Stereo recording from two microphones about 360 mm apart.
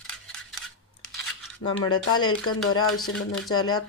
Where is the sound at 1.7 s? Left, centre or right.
Left.